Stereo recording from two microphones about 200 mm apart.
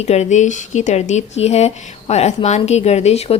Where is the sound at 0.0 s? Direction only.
35° left (ahead or behind).